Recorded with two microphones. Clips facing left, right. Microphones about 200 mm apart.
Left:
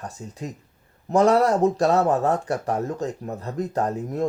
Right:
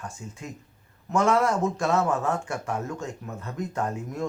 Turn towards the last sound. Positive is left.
turn(degrees=35)  # may be behind; listen again after turning